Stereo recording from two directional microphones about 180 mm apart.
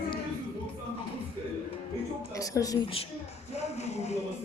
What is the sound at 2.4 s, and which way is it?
Speech, 20° left (ahead or behind).